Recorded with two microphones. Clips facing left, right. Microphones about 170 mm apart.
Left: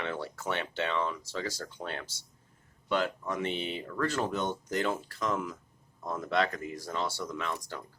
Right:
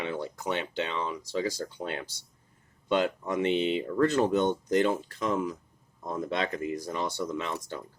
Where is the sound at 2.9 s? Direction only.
20° right (ahead or behind).